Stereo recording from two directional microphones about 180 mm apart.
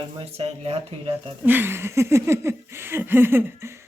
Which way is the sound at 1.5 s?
10° right (ahead or behind).